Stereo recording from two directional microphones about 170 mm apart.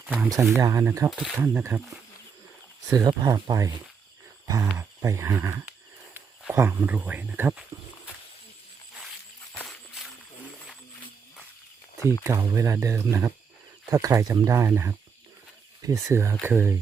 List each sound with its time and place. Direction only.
0.0 s speech: 10° right (ahead or behind)
2.9 s speech: 25° right (ahead or behind)
12.2 s speech: 20° right (ahead or behind)